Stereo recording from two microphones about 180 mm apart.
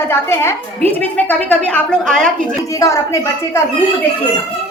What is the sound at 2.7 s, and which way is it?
Speech, 15° left (ahead or behind).